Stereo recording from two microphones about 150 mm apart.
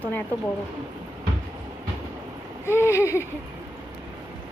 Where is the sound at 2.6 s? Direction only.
15° left (ahead or behind).